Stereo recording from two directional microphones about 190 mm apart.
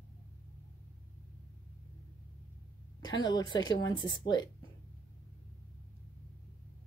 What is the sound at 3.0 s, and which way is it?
Speech, 20° left (ahead or behind).